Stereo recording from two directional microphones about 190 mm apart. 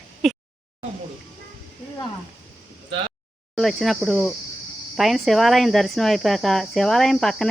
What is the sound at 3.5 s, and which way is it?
Speech, centre (ahead or behind).